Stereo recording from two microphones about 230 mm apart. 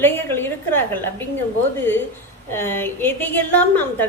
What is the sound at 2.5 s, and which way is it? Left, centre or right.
A woman's voice, centre.